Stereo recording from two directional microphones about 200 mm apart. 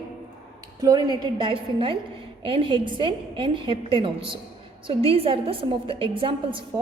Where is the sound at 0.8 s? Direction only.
20° right (ahead or behind).